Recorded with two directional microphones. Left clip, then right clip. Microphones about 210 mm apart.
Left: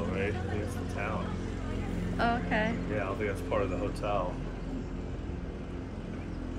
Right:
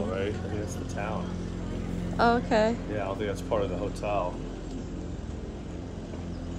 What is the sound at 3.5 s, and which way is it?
Speech, 50° right (ahead or behind).